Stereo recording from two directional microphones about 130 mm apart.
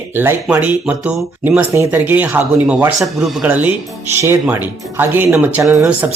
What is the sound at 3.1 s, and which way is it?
Speech, 5° right (ahead or behind).